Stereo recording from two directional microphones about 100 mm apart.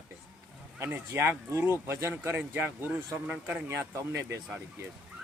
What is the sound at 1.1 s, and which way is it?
Speech, 20° right (ahead or behind).